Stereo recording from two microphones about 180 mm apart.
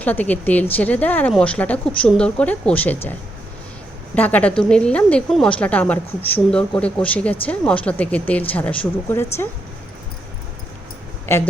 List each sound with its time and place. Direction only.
0.0 s a woman's voice: 10° left (ahead or behind)
11.3 s a woman's voice: 15° left (ahead or behind)